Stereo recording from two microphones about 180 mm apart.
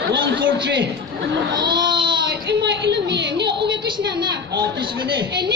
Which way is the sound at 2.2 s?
70° right (ahead or behind).